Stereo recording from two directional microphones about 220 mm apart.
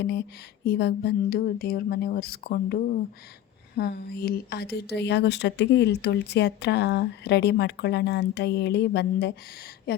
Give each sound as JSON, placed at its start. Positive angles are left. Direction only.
{"t": 0.0, "sound": "speech", "side_deg": 50}